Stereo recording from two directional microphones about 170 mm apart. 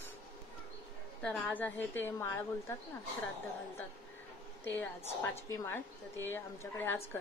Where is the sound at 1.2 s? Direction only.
10° left (ahead or behind).